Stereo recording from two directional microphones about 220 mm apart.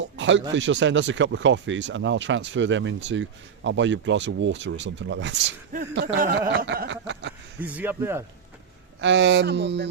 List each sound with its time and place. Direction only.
0.0 s a sound: 55° right (ahead or behind)
0.5 s speech: 55° right (ahead or behind)
7.6 s speech: 10° right (ahead or behind)
9.0 s speech: 55° right (ahead or behind)